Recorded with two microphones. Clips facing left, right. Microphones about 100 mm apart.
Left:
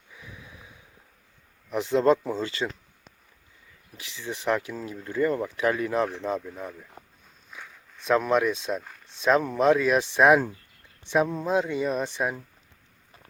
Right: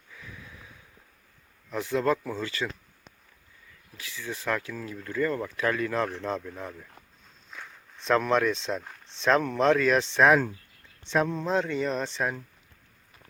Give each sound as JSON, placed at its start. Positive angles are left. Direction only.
{"t": 0.1, "sound": "sniff", "side_deg": 20}
{"t": 1.7, "sound": "speech", "side_deg": 25}
{"t": 3.9, "sound": "speech", "side_deg": 25}
{"t": 6.1, "sound": "speech", "side_deg": 5}